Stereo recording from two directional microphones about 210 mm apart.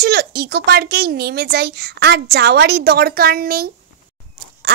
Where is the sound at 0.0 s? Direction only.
50° right (ahead or behind).